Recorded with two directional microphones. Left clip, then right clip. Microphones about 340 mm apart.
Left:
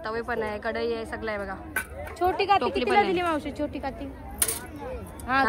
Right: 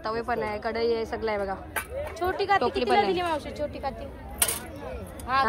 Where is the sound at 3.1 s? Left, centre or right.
Left.